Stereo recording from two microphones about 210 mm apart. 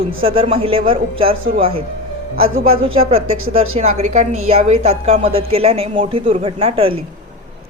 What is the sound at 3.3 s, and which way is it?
Speech, 80° right.